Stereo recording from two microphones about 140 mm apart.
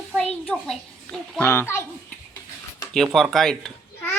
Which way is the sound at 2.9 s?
5° left (ahead or behind).